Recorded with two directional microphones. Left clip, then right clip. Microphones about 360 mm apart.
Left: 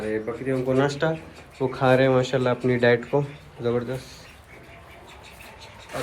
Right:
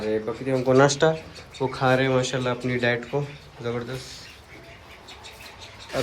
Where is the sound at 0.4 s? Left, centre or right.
Centre.